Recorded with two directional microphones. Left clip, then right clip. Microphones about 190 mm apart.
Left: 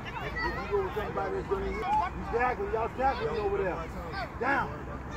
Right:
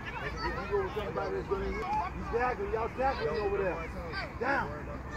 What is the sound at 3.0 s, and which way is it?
Speech, 10° left (ahead or behind).